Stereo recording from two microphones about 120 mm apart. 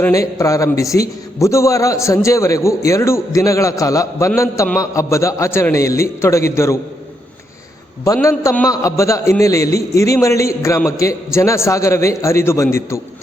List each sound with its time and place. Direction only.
0.1 s a man's voice: 25° left (ahead or behind)
8.0 s a man's voice: 25° left (ahead or behind)